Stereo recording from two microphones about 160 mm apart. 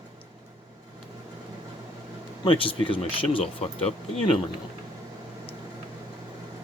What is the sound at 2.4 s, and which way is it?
Speech, 35° left (ahead or behind).